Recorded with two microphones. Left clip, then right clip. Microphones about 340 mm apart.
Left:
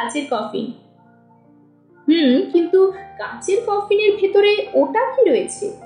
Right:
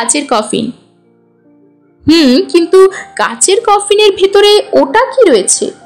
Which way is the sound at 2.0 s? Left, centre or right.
Right.